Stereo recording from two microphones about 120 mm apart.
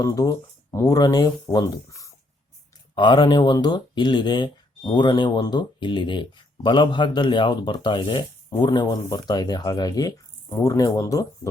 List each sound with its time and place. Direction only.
0.0 s speech: 30° left (ahead or behind)